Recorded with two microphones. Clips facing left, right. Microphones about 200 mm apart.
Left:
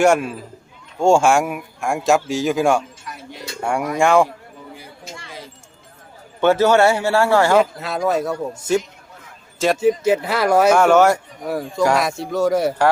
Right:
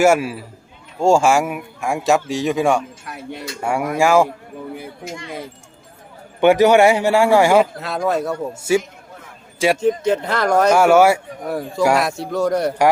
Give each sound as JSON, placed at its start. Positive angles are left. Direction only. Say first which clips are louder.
{"t": 0.0, "sound": "a man's voice", "louder": "right 1 dB", "side_deg": -5}
{"t": 3.1, "sound": "a sound", "louder": "right 4 dB", "side_deg": -60}
{"t": 3.6, "sound": "speech", "louder": "even", "side_deg": -5}
{"t": 6.4, "sound": "a man's voice", "louder": "right 2 dB", "side_deg": -15}
{"t": 7.6, "sound": "speech", "louder": "even", "side_deg": 0}
{"t": 9.7, "sound": "speech", "louder": "left 1 dB", "side_deg": 5}
{"t": 10.8, "sound": "a man's voice", "louder": "right 1 dB", "side_deg": -10}